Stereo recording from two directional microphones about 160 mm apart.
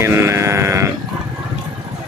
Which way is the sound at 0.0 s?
15° right (ahead or behind).